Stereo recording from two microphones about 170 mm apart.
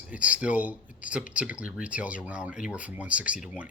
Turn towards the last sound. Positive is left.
turn(degrees=-5)  # may be behind; listen again after turning